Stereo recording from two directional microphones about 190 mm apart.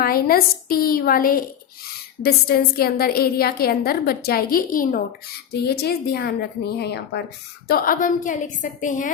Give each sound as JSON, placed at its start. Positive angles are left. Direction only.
{"t": 0.0, "sound": "a woman's voice", "side_deg": 50}